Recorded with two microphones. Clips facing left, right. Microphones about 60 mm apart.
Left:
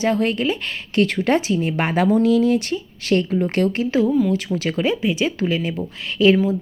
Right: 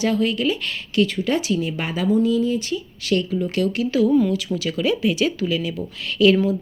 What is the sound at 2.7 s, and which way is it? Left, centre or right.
A woman's voice, left.